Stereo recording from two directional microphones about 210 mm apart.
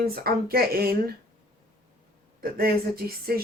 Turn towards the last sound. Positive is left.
turn(degrees=-45)  # may be behind; listen again after turning